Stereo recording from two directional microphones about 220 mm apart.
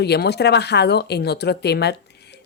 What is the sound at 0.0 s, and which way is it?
Speech, 50° left (ahead or behind).